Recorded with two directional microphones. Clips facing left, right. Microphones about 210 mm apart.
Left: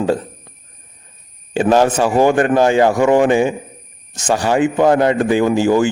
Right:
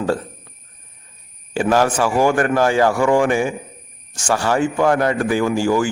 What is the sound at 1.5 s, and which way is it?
A man's voice, 20° left (ahead or behind).